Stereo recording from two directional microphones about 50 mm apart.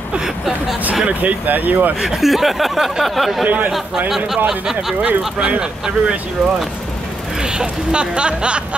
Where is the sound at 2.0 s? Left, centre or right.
Centre.